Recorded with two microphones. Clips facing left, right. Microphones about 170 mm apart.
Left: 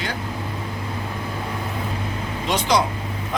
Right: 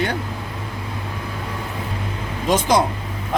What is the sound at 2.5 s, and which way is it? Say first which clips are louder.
Speech: right 3 dB; 50° right (ahead or behind).